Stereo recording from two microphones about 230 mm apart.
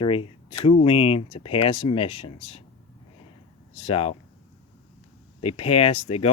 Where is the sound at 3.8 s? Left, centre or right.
Left.